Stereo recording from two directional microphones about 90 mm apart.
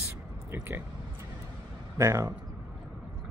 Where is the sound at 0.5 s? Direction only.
25° right (ahead or behind).